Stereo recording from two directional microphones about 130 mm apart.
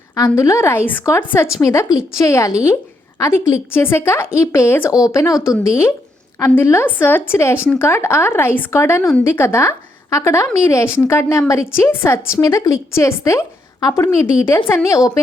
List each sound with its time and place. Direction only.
0.2 s a woman's voice: 25° left (ahead or behind)